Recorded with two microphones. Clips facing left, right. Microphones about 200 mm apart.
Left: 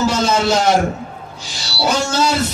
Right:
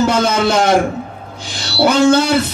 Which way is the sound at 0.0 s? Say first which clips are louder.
Right 2 dB; 55° right (ahead or behind).